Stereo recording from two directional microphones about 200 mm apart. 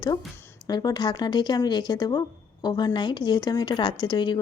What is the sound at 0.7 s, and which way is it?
A woman's voice, 20° left (ahead or behind).